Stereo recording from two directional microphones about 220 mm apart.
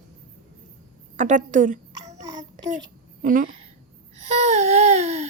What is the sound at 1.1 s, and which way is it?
A woman's voice, 35° right (ahead or behind).